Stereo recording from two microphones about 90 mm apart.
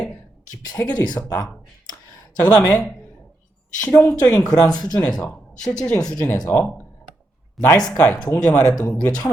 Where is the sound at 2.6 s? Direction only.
15° left (ahead or behind).